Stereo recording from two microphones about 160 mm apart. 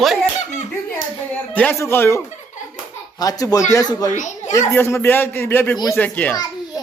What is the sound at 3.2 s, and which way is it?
A man's voice, 25° left (ahead or behind).